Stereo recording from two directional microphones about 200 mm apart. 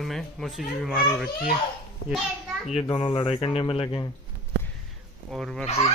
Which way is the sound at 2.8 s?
25° left (ahead or behind).